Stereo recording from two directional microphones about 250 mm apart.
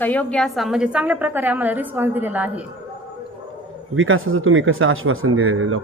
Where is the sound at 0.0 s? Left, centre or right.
Centre.